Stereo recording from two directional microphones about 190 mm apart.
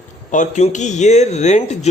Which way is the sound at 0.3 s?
40° left (ahead or behind).